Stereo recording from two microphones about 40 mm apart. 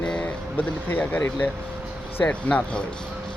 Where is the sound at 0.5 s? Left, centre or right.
Left.